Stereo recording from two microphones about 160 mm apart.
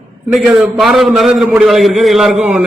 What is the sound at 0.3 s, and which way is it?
A man's voice, centre (ahead or behind).